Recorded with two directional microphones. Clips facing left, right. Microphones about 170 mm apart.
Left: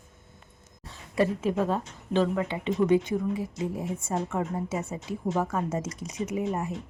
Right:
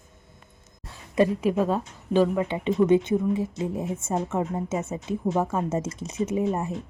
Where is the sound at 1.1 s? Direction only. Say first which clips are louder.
Right 4 dB; 15° right (ahead or behind).